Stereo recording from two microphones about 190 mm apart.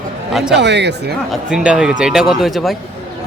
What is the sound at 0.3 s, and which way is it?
Speech, 5° right (ahead or behind).